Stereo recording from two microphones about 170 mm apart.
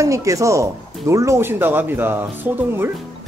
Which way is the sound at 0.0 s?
20° right (ahead or behind).